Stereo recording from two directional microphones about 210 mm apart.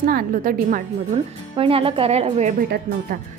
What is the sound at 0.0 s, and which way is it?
A woman's voice, 40° right (ahead or behind).